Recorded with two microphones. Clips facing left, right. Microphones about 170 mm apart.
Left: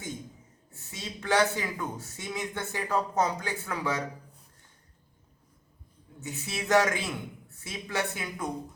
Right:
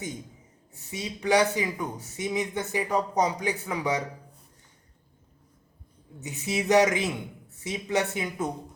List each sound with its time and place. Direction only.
0.7 s a man's voice: 15° right (ahead or behind)
6.1 s speech: 20° right (ahead or behind)